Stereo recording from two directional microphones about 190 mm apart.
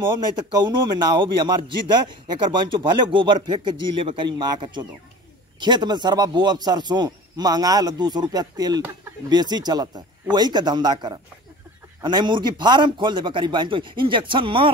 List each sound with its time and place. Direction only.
0.4 s a man's voice: 20° right (ahead or behind)